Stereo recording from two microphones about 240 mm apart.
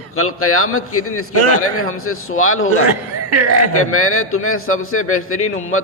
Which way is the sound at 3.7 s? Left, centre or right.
Left.